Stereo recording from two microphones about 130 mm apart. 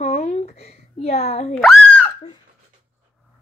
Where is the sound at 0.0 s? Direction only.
55° left (ahead or behind).